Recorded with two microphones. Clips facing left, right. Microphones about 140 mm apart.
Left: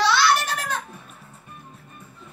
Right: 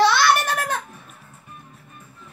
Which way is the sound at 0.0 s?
55° right (ahead or behind).